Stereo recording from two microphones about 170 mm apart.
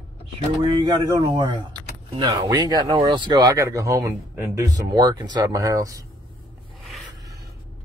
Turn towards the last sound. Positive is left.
turn(degrees=-20)  # may be behind; listen again after turning